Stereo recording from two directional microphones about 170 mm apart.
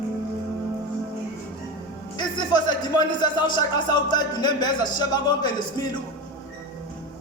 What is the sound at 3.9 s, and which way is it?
Speech, 25° left (ahead or behind).